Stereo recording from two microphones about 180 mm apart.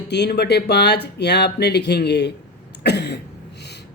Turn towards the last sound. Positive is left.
turn(degrees=65)  # may be behind; listen again after turning